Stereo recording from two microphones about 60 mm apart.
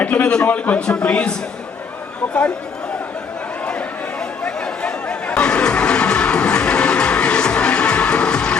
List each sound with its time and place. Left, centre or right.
0.1 s a sound: centre
0.4 s a man's voice: left
0.8 s speech: centre
3.7 s chatter: centre